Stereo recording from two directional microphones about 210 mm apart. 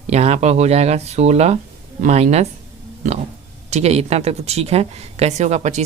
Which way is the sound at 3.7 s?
30° right (ahead or behind).